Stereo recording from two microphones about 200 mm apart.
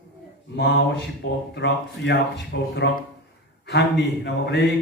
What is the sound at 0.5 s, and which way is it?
Speech, 60° left (ahead or behind).